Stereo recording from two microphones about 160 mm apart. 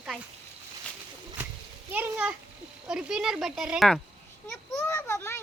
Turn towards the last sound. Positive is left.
turn(degrees=15)  # may be behind; listen again after turning